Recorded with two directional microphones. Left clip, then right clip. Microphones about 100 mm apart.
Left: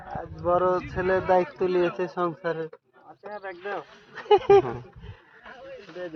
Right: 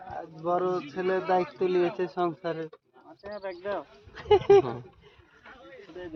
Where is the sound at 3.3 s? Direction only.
75° right (ahead or behind).